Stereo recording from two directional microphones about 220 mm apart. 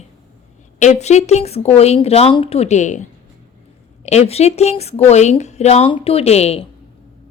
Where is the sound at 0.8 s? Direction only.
30° left (ahead or behind).